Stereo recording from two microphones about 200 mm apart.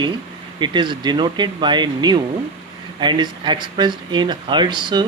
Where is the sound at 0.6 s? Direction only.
25° right (ahead or behind).